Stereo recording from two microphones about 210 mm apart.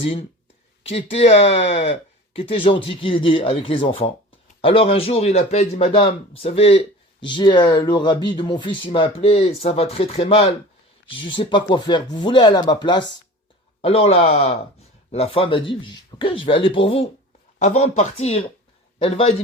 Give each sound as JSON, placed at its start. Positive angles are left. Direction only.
{"t": 0.0, "sound": "a man's voice", "side_deg": 25}